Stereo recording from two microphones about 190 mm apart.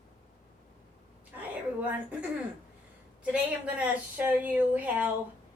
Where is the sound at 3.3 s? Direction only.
5° right (ahead or behind).